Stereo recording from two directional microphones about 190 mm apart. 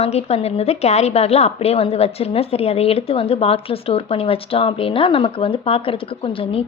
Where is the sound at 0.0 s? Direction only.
35° left (ahead or behind).